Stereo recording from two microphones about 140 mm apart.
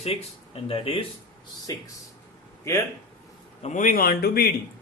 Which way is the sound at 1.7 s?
25° left (ahead or behind).